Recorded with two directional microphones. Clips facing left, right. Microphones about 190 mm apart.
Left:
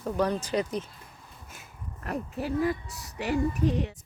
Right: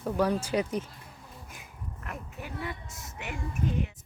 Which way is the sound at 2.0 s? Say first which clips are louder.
Left 10 dB; 35° left (ahead or behind).